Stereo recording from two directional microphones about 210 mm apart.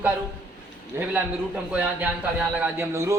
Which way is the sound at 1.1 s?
5° right (ahead or behind).